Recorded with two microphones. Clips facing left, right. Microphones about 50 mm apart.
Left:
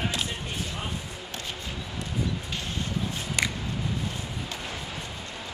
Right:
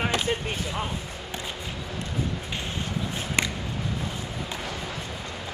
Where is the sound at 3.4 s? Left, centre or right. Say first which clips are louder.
Right 2 dB; right.